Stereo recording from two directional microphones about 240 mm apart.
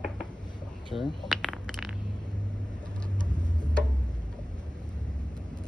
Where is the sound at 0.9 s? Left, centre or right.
Centre.